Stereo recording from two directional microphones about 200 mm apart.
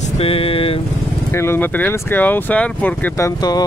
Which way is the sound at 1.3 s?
10° left (ahead or behind).